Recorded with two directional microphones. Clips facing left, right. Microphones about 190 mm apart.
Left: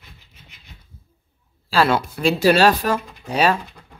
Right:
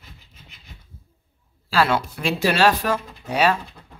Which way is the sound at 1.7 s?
35° left (ahead or behind).